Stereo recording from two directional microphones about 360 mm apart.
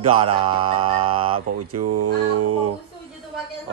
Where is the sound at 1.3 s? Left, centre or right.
Right.